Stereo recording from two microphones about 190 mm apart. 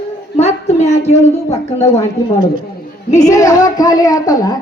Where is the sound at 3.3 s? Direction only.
20° left (ahead or behind).